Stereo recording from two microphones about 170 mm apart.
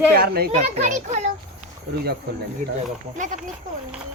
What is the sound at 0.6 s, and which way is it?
Speech, 40° right (ahead or behind).